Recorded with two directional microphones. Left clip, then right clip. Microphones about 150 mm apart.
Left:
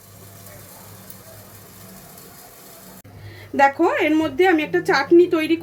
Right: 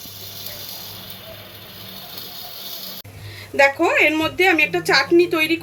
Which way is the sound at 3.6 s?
55° left (ahead or behind).